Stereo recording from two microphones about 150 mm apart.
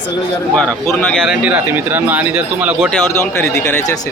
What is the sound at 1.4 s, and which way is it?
Speech, 10° right (ahead or behind).